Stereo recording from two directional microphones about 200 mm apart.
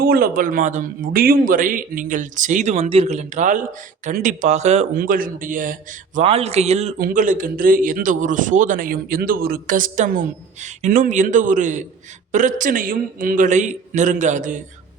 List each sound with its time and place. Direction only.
0.0 s a man's voice: 45° right (ahead or behind)
6.1 s a man's voice: 30° right (ahead or behind)